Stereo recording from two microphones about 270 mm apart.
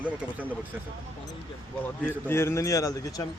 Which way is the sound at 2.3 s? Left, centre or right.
Centre.